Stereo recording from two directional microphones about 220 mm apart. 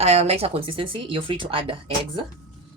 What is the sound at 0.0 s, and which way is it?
Speech, 30° right (ahead or behind).